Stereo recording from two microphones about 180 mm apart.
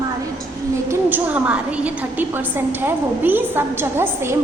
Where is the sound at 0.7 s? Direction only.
15° right (ahead or behind).